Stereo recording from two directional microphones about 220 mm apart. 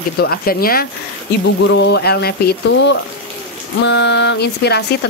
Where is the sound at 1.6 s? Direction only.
55° left (ahead or behind).